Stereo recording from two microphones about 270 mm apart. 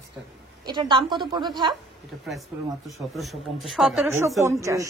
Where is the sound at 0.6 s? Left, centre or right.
Centre.